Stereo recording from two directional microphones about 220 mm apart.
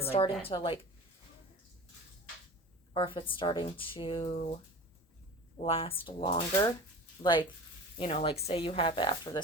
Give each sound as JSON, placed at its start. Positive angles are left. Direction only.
{"t": 0.1, "sound": "speech", "side_deg": 25}
{"t": 2.9, "sound": "speech", "side_deg": 20}
{"t": 5.5, "sound": "speech", "side_deg": 25}